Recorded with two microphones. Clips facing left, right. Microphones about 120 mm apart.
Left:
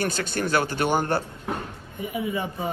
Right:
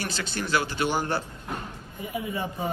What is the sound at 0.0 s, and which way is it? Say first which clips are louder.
Speech: left 5 dB; 50° left (ahead or behind).